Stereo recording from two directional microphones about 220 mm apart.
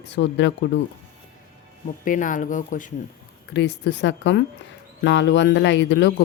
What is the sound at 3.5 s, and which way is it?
Speech, 50° left (ahead or behind).